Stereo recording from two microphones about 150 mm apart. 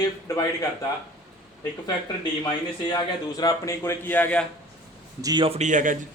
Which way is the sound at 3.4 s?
25° left (ahead or behind).